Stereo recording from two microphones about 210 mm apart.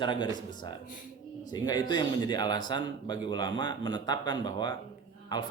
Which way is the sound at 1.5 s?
20° left (ahead or behind).